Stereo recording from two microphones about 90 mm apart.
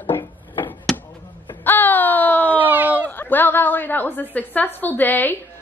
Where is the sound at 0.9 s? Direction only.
5° left (ahead or behind).